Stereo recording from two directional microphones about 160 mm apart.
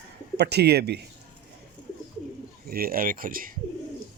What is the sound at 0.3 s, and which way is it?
Speech, 90° right.